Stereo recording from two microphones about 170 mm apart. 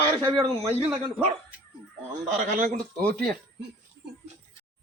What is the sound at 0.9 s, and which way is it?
Speech, 10° right (ahead or behind).